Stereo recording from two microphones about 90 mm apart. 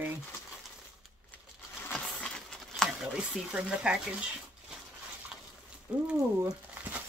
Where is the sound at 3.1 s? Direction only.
10° right (ahead or behind).